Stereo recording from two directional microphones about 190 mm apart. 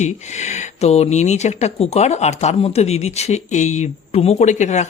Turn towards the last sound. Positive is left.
turn(degrees=40)  # may be behind; listen again after turning